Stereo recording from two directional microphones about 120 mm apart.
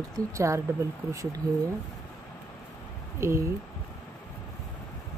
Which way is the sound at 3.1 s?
25° right (ahead or behind).